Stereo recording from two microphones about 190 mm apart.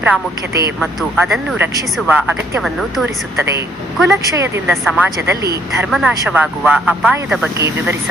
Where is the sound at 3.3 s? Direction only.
15° right (ahead or behind).